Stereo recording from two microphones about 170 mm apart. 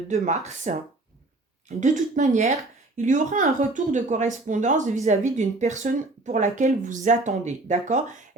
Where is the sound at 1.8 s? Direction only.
45° right (ahead or behind).